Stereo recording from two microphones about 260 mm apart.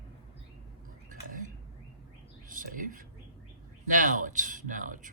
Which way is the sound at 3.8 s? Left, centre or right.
Right.